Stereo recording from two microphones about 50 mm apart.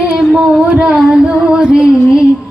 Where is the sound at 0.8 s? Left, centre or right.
Right.